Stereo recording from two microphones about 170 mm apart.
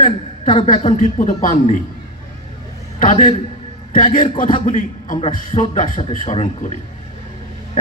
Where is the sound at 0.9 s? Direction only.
55° left (ahead or behind).